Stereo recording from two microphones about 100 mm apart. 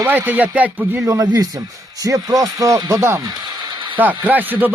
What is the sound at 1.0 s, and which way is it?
Speech, 30° right (ahead or behind).